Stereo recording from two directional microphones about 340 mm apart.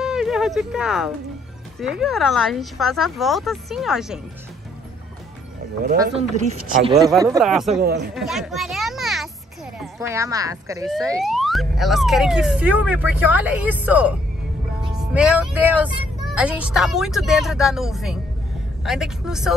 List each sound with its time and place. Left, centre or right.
0.0 s speech: centre
6.7 s speech: centre
7.7 s speech: right
8.1 s children playing: centre
9.8 s speech: centre
14.8 s music: centre
16.3 s speech: centre